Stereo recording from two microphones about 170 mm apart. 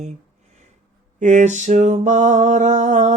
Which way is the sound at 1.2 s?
45° right (ahead or behind).